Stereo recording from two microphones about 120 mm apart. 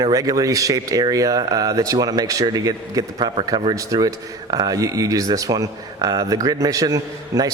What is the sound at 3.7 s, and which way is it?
Speech, 30° right (ahead or behind).